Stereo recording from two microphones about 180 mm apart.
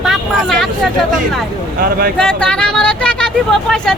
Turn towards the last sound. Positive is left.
turn(degrees=5)  # may be behind; listen again after turning